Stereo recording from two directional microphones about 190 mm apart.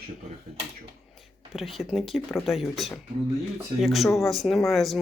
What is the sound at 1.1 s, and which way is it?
Speech, centre (ahead or behind).